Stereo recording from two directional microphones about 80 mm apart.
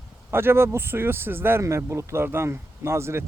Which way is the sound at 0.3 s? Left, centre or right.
Right.